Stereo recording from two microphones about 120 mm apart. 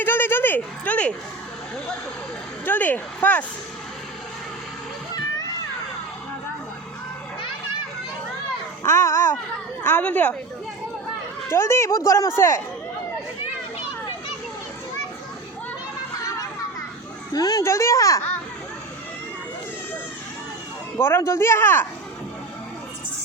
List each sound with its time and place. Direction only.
0.0 s a sound: 20° left (ahead or behind)
2.6 s speech: 15° left (ahead or behind)
8.8 s babbling: 20° left (ahead or behind)
9.8 s speech: 15° left (ahead or behind)
11.4 s speech: 20° left (ahead or behind)
17.3 s speech: 30° left (ahead or behind)
21.0 s speech: 20° left (ahead or behind)